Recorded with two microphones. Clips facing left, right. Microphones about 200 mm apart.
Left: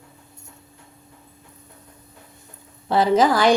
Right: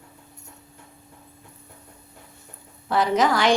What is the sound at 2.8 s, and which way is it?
Speech, 30° left (ahead or behind).